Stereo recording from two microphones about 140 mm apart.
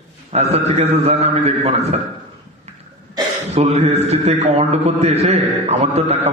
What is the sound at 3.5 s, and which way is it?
A man's voice, 50° right (ahead or behind).